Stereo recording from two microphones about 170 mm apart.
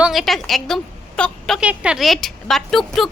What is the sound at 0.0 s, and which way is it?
A woman's voice, centre (ahead or behind).